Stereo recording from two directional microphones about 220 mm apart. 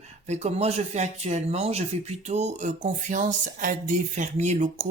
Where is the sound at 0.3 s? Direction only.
30° right (ahead or behind).